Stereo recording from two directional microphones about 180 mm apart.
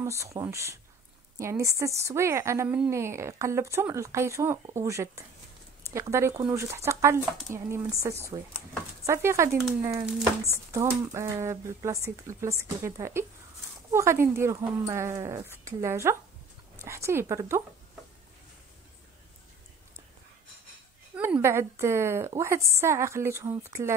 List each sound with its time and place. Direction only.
0.0 s a woman's voice: 15° right (ahead or behind)
21.2 s a woman's voice: 15° right (ahead or behind)